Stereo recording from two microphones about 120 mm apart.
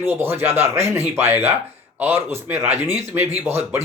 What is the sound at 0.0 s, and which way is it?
Speech, 20° right (ahead or behind).